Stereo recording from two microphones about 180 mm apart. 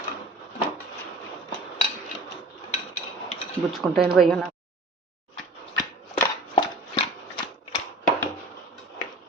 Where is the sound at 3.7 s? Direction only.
Centre (ahead or behind).